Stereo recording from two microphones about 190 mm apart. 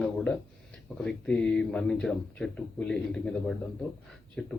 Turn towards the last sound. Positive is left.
turn(degrees=5)  # may be behind; listen again after turning